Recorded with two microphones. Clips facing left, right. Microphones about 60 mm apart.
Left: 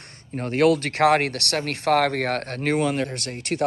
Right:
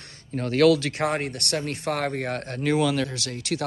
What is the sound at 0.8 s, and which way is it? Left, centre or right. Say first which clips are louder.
Speech: left 7 dB; left.